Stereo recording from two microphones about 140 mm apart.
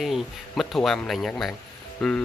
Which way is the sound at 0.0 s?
Centre (ahead or behind).